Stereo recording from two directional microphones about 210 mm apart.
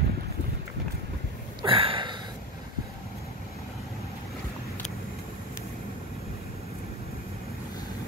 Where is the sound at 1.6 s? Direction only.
25° right (ahead or behind).